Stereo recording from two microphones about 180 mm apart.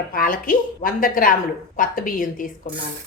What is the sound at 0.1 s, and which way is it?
A woman's voice, 50° left (ahead or behind).